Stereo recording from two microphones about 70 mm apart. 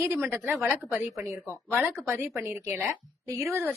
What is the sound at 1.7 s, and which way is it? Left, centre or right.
Speech, centre.